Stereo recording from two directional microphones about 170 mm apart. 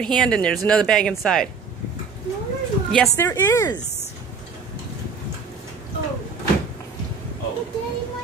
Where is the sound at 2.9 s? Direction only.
15° left (ahead or behind).